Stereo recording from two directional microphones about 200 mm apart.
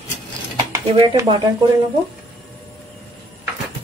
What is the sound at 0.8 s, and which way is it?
Speech, 20° right (ahead or behind).